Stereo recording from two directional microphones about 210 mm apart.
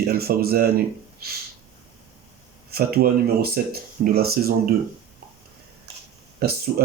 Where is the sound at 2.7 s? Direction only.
45° right (ahead or behind).